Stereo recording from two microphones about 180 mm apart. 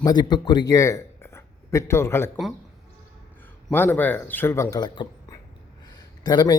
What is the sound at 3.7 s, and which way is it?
Speech, 10° left (ahead or behind).